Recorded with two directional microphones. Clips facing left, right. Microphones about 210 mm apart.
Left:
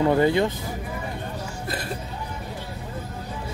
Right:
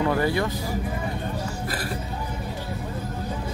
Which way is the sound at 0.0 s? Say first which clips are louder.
Left 4 dB; 20° left (ahead or behind).